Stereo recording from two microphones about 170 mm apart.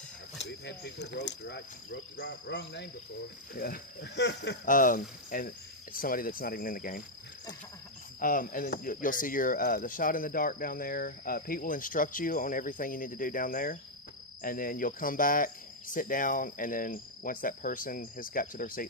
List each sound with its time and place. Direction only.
0.3 s speech: 90° left
3.5 s cricket: 65° left (ahead or behind); by 4.5 s 90° left
4.6 s speech: 55° left (ahead or behind)
8.2 s speech: 55° left (ahead or behind)